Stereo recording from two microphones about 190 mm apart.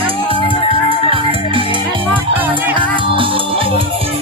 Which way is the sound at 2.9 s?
25° right (ahead or behind).